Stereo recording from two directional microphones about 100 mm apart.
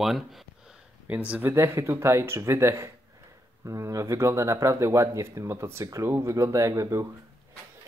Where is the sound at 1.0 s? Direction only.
15° right (ahead or behind).